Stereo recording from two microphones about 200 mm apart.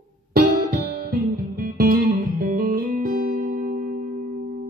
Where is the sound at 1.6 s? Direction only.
45° right (ahead or behind).